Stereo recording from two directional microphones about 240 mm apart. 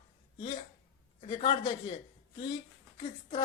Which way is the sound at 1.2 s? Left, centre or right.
Left.